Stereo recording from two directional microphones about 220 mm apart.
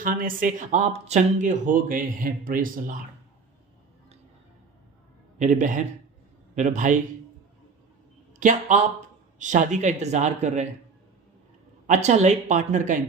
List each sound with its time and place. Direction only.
0.0 s speech: 40° right (ahead or behind)
5.4 s speech: 35° right (ahead or behind)
8.4 s speech: 35° right (ahead or behind)
11.9 s speech: 30° right (ahead or behind)